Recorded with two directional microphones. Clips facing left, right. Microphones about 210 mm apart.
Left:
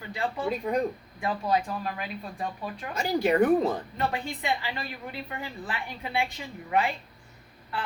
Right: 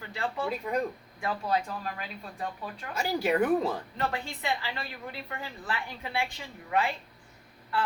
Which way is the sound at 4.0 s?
15° left (ahead or behind).